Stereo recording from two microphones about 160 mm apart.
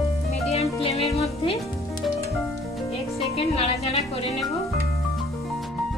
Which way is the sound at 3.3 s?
40° left (ahead or behind).